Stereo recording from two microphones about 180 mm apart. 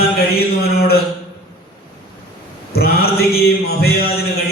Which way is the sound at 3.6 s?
60° left (ahead or behind).